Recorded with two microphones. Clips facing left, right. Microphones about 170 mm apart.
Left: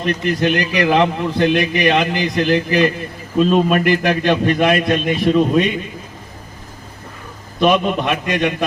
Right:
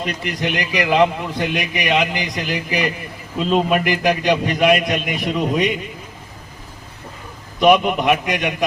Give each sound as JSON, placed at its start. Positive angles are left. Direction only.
{"t": 0.0, "sound": "a man's voice", "side_deg": -15}
{"t": 7.6, "sound": "a man's voice", "side_deg": -15}